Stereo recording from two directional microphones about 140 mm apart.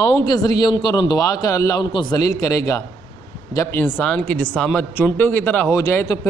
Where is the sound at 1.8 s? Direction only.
35° left (ahead or behind).